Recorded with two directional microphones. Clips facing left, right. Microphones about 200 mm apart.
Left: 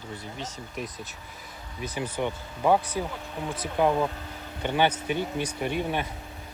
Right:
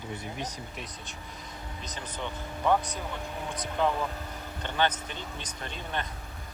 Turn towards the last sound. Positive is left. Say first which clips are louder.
# left 8 dB
turn(degrees=10)  # may be behind; listen again after turning